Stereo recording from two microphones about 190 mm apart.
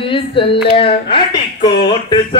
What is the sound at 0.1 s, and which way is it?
Speech, 25° left (ahead or behind).